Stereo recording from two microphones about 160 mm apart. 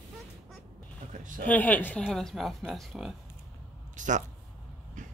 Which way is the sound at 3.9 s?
50° right (ahead or behind).